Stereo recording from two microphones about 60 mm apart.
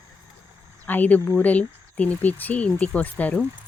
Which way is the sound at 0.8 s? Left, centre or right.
Left.